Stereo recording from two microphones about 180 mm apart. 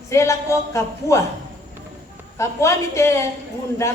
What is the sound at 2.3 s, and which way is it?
Speech, 15° left (ahead or behind).